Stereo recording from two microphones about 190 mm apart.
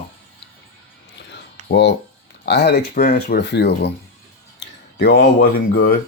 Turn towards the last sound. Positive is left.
turn(degrees=50)  # may be behind; listen again after turning